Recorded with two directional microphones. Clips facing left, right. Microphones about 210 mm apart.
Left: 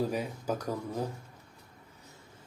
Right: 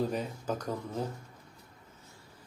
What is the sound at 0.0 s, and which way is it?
Speech, 10° left (ahead or behind).